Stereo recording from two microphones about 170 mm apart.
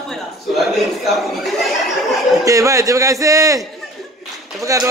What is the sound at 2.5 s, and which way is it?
A man's voice, 20° right (ahead or behind).